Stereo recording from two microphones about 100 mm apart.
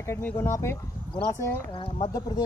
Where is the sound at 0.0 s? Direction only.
25° left (ahead or behind).